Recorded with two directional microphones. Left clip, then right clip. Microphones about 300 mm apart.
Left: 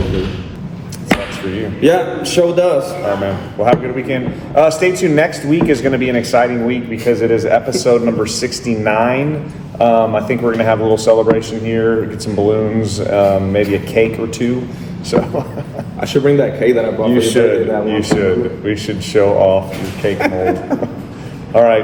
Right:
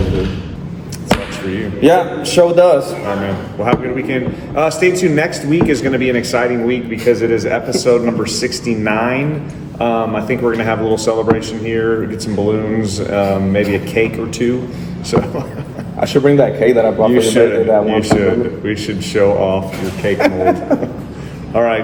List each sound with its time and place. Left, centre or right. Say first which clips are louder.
1.8 s speech: right 1 dB; centre
3.6 s speech: left 3 dB; centre
16.0 s speech: right 2 dB; centre
17.1 s speech: right 1 dB; centre
20.1 s speech: right 4 dB; centre
21.5 s speech: left 4 dB; centre